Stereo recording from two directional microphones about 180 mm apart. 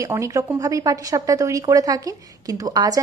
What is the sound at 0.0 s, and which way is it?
A woman's voice, 15° right (ahead or behind).